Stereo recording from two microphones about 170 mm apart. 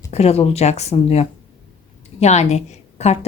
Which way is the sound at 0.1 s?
40° left (ahead or behind).